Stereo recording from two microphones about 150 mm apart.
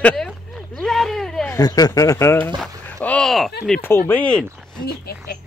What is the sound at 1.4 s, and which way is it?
Speech, 25° left (ahead or behind).